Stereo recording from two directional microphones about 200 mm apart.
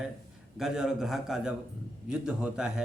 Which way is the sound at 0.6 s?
5° right (ahead or behind).